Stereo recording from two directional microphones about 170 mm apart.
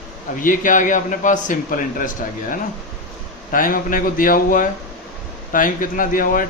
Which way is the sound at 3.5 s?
55° left (ahead or behind).